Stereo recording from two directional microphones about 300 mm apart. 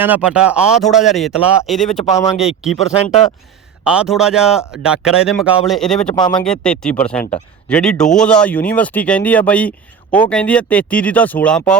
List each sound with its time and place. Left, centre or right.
0.0 s speech: centre
2.7 s speech: left
3.8 s speech: centre
6.1 s speech: centre
6.4 s speech: centre